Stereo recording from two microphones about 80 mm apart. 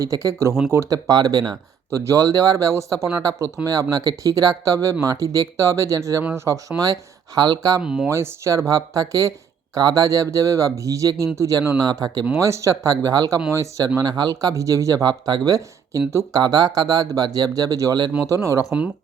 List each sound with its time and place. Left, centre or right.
0.0 s speech: right
0.9 s speech: right
1.9 s speech: right
7.8 s speech: centre
8.0 s speech: right
11.8 s speech: right
12.4 s speech: right
14.0 s speech: right
14.5 s speech: right